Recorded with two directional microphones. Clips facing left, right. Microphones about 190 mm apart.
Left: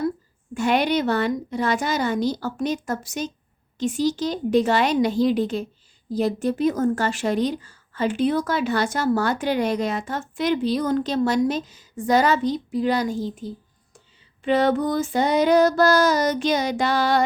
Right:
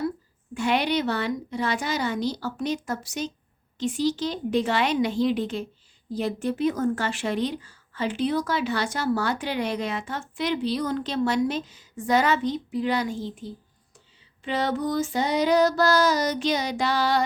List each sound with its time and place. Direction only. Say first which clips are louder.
0.5 s a woman's voice: left 3 dB; 45° left (ahead or behind)
14.4 s speech: left 6 dB; 55° left (ahead or behind)